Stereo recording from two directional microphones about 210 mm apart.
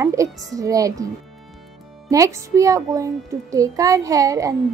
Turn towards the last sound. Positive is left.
turn(degrees=-15)  # may be behind; listen again after turning